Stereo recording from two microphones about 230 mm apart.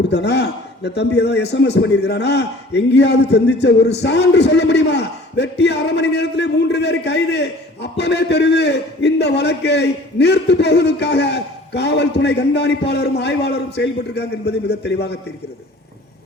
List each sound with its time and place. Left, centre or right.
0.1 s a man's voice: left